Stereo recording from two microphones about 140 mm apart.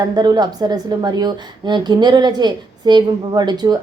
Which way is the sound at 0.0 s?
30° right (ahead or behind).